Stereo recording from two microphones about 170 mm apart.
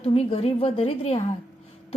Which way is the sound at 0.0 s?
35° left (ahead or behind).